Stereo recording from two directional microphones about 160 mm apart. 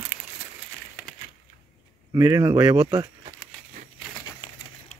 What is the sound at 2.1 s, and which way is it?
Speech, 20° right (ahead or behind).